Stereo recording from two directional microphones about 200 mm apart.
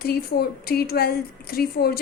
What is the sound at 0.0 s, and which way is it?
Speech, 50° left (ahead or behind).